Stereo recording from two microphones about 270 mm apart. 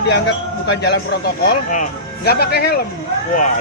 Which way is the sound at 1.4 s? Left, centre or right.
Left.